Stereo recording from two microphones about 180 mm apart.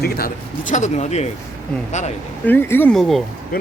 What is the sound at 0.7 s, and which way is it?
Speech, 40° left (ahead or behind).